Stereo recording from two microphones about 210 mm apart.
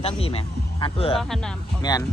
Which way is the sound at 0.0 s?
25° left (ahead or behind).